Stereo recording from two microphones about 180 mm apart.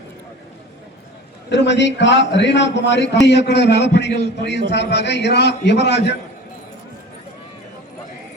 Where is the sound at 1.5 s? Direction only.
75° left (ahead or behind).